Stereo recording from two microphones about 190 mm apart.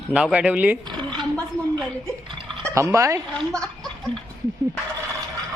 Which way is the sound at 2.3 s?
25° right (ahead or behind).